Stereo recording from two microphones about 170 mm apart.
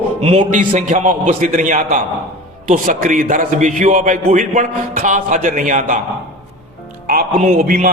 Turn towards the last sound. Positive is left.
turn(degrees=-55)  # may be behind; listen again after turning